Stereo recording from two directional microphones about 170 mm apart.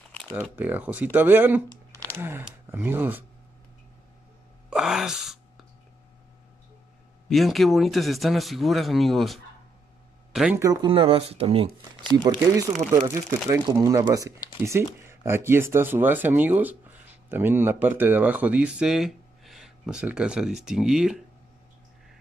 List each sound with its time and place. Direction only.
0.6 s speech: 10° right (ahead or behind)
4.6 s a sound: 5° right (ahead or behind)
7.2 s a man's voice: centre (ahead or behind)
10.6 s speech: 25° right (ahead or behind); by 21.2 s 5° right (ahead or behind)